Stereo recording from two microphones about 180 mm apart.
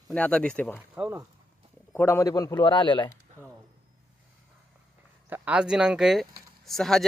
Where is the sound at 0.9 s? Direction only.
15° right (ahead or behind).